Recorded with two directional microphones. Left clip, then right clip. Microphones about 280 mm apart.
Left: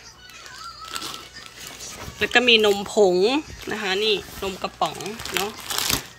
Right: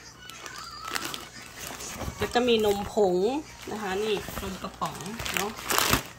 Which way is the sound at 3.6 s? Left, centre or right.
Centre.